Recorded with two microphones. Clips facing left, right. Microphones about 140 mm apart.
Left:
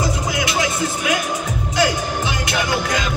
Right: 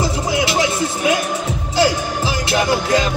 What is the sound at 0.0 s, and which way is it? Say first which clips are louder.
Music: right 3 dB; 30° right (ahead or behind).